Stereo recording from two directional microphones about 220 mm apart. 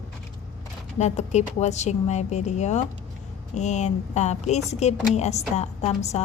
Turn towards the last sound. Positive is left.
turn(degrees=30)  # may be behind; listen again after turning